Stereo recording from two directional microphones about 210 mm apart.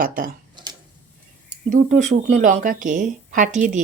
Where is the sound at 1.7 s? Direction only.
35° right (ahead or behind).